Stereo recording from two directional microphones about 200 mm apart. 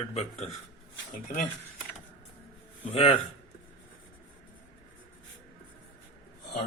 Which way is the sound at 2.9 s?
30° left (ahead or behind).